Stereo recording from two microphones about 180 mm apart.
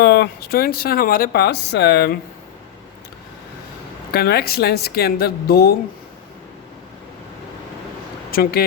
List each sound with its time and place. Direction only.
0.0 s speech: 65° left (ahead or behind)
4.1 s speech: 60° left (ahead or behind)
8.3 s speech: 55° left (ahead or behind)